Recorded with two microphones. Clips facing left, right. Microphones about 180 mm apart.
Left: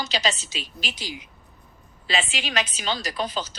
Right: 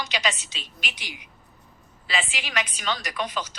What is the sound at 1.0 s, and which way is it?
Speech, 15° right (ahead or behind).